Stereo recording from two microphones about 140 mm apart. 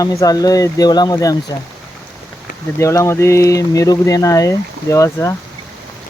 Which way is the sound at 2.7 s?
20° left (ahead or behind).